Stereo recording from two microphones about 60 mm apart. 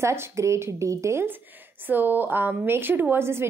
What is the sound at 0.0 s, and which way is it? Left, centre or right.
A woman's voice, right.